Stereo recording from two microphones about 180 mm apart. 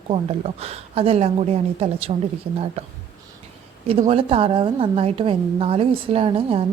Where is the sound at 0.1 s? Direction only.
35° right (ahead or behind).